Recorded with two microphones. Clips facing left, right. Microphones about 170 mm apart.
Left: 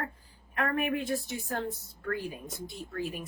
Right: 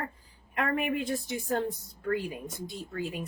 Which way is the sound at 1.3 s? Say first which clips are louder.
Right 4 dB; 15° right (ahead or behind).